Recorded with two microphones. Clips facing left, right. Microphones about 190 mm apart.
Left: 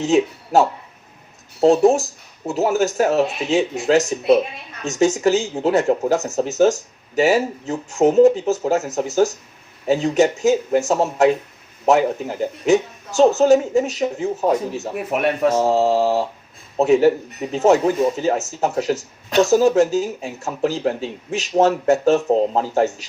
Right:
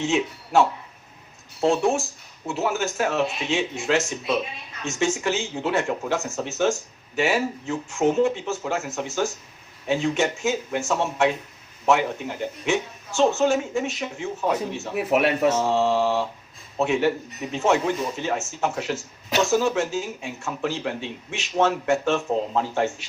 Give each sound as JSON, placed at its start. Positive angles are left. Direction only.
{"t": 0.0, "sound": "speech", "side_deg": 40}
{"t": 14.9, "sound": "speech", "side_deg": -5}
{"t": 15.5, "sound": "speech", "side_deg": 40}